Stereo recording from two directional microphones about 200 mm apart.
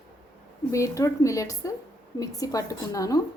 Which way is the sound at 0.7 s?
15° left (ahead or behind).